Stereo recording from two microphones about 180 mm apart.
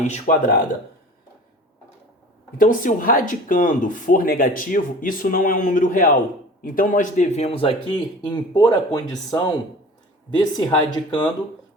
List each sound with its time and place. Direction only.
0.0 s speech: 45° left (ahead or behind)
2.6 s speech: 50° left (ahead or behind); by 11.3 s 25° left (ahead or behind)